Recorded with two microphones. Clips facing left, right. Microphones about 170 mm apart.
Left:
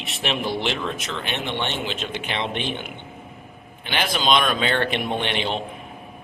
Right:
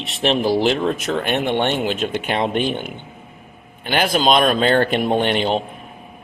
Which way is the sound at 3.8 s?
45° right (ahead or behind).